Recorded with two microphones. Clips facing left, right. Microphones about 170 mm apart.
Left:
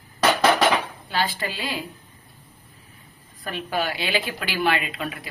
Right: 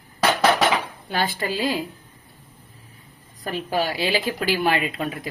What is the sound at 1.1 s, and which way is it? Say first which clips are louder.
Speech: right 2 dB; 50° right (ahead or behind).